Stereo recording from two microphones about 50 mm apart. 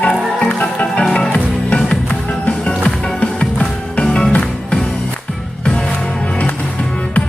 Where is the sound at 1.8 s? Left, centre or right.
Left.